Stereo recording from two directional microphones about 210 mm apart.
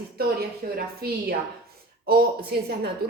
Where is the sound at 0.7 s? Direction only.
45° right (ahead or behind).